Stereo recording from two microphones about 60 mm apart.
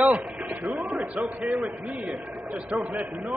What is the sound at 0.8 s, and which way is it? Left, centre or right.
Speech, right.